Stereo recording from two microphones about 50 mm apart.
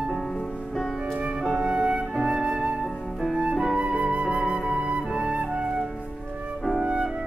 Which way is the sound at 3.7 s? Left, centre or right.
Right.